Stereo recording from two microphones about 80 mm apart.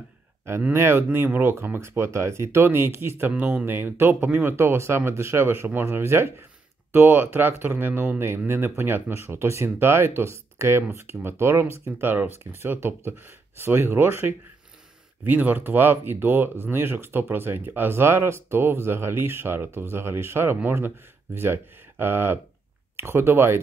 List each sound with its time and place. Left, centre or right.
0.5 s speech: right